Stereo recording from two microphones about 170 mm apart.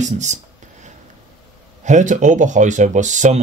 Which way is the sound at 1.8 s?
45° right (ahead or behind).